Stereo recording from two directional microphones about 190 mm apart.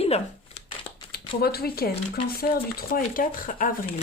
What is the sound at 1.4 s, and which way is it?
A woman's voice, 55° left (ahead or behind).